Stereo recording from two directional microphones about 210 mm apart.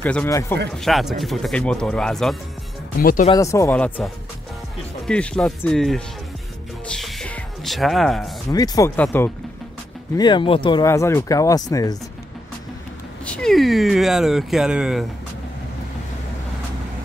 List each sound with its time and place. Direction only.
0.0 s speech: 10° left (ahead or behind)
0.7 s speech: centre (ahead or behind)
3.0 s speech: 45° left (ahead or behind)
3.3 s speech: 15° left (ahead or behind)
6.9 s music: centre (ahead or behind)
8.5 s speech: 15° left (ahead or behind)
10.1 s speech: 20° left (ahead or behind)
13.2 s speech: 5° left (ahead or behind)